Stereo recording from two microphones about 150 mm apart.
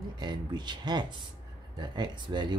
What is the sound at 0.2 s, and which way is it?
Speech, 30° right (ahead or behind).